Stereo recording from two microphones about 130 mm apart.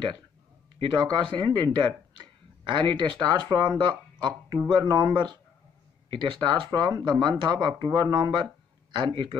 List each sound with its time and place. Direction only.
0.7 s speech: 35° right (ahead or behind)